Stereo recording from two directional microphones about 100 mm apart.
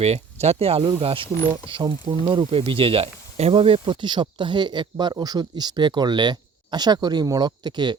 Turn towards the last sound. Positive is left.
turn(degrees=-50)  # may be behind; listen again after turning